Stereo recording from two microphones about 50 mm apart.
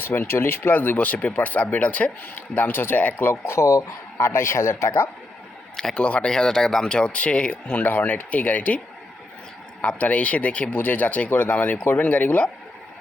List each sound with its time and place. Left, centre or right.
0.1 s speech: left
2.6 s speech: left
3.4 s speech: left
5.7 s speech: centre
6.0 s speech: left
7.9 s speech: left
9.8 s speech: left
10.7 s speech: left